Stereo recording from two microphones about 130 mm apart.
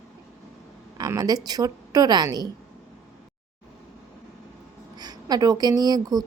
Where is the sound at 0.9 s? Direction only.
30° right (ahead or behind).